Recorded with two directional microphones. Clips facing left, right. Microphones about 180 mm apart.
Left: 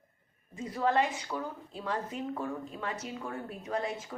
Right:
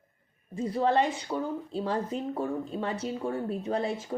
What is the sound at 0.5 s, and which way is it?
Speech, 30° right (ahead or behind).